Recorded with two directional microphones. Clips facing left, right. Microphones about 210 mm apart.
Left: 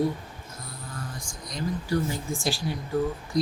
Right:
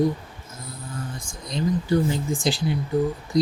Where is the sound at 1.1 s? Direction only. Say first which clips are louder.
Right 7 dB; 25° right (ahead or behind).